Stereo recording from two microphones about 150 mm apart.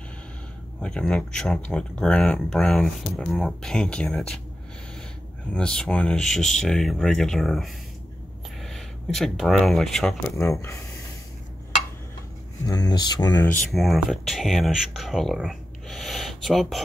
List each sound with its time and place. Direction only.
0.7 s speech: 5° left (ahead or behind)
5.5 s speech: 5° left (ahead or behind)
10.3 s speech: 15° left (ahead or behind)
12.6 s speech: 25° left (ahead or behind)
13.7 s speech: centre (ahead or behind)